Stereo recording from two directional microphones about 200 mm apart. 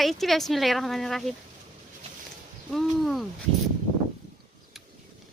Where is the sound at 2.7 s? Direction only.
Centre (ahead or behind).